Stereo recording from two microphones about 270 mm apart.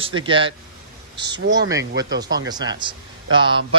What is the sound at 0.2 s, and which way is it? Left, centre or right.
Speech, centre.